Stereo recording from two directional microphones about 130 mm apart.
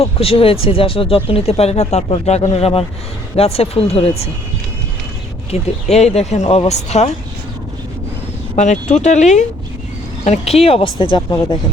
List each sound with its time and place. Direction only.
0.0 s speech: 45° left (ahead or behind)
5.5 s speech: 55° left (ahead or behind)
8.5 s speech: 65° left (ahead or behind); by 11.6 s 35° left (ahead or behind)